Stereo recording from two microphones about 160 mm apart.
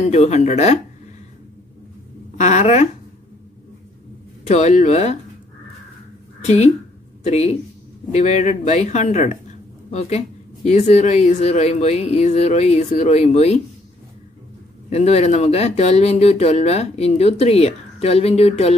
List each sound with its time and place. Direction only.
0.0 s speech: 45° left (ahead or behind)
2.3 s speech: 45° left (ahead or behind)
4.5 s speech: 45° left (ahead or behind)
6.4 s speech: 45° left (ahead or behind)
14.9 s speech: 40° left (ahead or behind)